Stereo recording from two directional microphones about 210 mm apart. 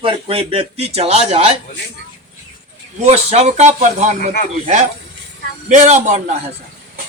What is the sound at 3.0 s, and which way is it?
Speech, 30° right (ahead or behind).